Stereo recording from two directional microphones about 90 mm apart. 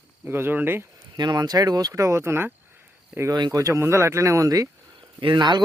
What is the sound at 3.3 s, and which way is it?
Speech, 50° right (ahead or behind).